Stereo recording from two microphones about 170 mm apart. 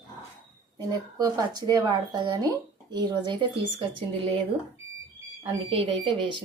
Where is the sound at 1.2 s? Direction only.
25° right (ahead or behind).